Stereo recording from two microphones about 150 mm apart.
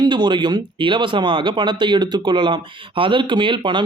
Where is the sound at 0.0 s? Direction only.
30° right (ahead or behind).